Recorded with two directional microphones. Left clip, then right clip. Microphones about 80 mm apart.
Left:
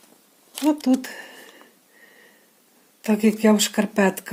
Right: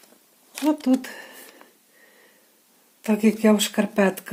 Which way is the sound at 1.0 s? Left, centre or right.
Left.